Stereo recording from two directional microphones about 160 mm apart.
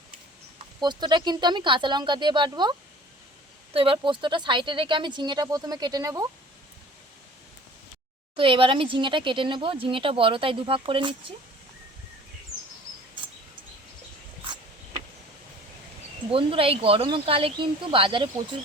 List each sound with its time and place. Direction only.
0.8 s speech: 25° right (ahead or behind)
8.4 s speech: 35° right (ahead or behind)
16.3 s speech: 35° right (ahead or behind)